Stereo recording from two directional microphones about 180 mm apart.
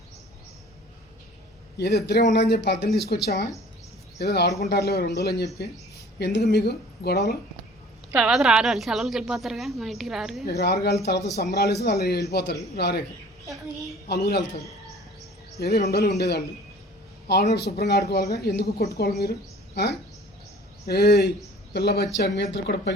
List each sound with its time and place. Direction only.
1.7 s speech: 65° left (ahead or behind)
8.1 s a woman's voice: 5° right (ahead or behind)
10.4 s speech: 65° left (ahead or behind)
14.1 s speech: 65° left (ahead or behind)
15.9 s speech: 65° left (ahead or behind)